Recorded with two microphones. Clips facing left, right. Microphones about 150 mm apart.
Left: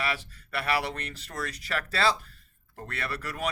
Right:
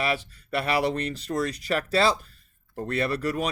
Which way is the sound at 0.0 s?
20° right (ahead or behind).